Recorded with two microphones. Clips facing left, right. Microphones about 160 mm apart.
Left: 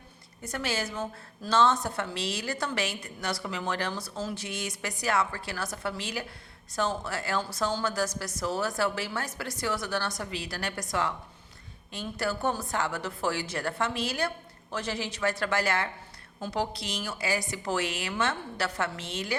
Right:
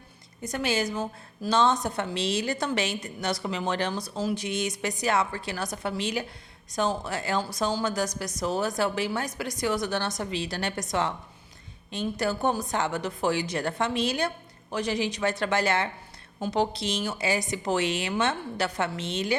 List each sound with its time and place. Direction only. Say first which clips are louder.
0.4 s a woman's voice: right 5 dB; 20° right (ahead or behind)